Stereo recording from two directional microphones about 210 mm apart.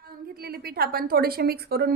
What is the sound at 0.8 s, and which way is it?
A woman's voice, 45° right (ahead or behind).